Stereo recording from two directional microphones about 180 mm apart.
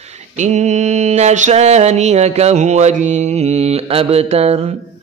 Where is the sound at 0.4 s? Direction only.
40° right (ahead or behind).